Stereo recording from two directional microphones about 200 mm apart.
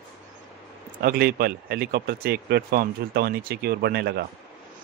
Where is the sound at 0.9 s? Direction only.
50° right (ahead or behind).